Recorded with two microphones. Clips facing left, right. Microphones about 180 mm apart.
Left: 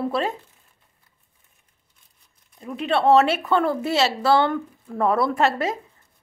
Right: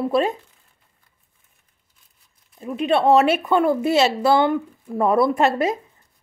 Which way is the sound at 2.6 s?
15° right (ahead or behind).